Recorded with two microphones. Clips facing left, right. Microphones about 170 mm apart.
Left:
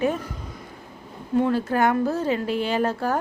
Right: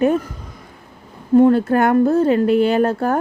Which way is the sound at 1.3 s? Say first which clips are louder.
Right 9 dB; 50° right (ahead or behind).